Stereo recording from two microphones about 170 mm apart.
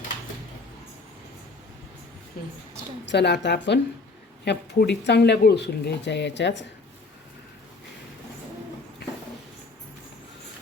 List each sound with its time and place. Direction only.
3.1 s speech: 85° left